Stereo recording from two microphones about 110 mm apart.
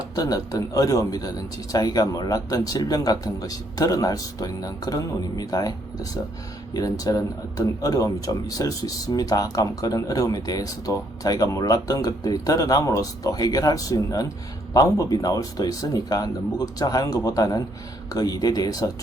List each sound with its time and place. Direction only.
0.2 s speech: 35° left (ahead or behind)